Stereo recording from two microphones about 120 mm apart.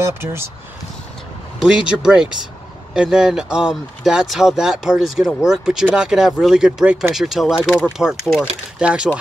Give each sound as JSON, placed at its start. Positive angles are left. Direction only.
{"t": 0.0, "sound": "speech", "side_deg": -20}
{"t": 1.6, "sound": "speech", "side_deg": -5}